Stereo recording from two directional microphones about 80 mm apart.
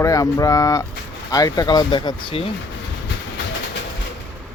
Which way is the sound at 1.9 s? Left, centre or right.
Left.